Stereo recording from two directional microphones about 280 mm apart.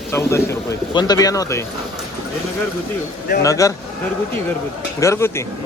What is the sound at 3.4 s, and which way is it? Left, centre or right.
Speech, centre.